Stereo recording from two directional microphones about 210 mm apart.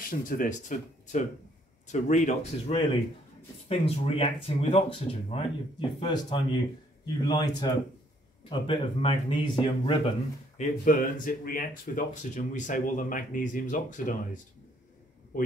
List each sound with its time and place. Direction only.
0.1 s speech: 40° left (ahead or behind); by 10.1 s 25° left (ahead or behind)
10.6 s speech: 40° left (ahead or behind)